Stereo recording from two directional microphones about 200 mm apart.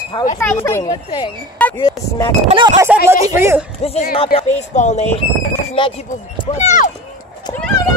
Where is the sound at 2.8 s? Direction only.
15° right (ahead or behind).